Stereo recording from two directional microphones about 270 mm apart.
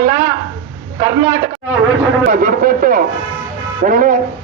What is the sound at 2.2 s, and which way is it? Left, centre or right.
A man's voice, right.